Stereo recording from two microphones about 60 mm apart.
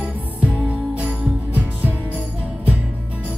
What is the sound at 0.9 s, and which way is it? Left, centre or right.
Music, right.